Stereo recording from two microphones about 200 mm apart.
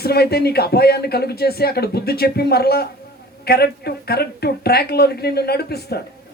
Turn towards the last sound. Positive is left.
turn(degrees=55)  # may be behind; listen again after turning